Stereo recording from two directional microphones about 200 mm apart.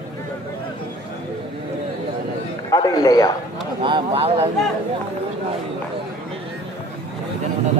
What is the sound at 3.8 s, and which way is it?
Speech, 25° right (ahead or behind).